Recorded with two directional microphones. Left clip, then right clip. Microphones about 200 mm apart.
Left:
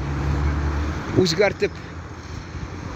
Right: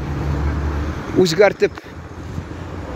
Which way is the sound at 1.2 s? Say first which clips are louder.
Right 6 dB; 30° right (ahead or behind).